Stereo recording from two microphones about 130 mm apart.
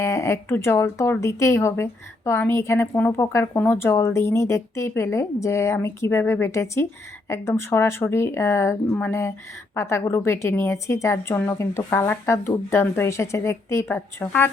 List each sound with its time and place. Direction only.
0.0 s speech: 20° left (ahead or behind)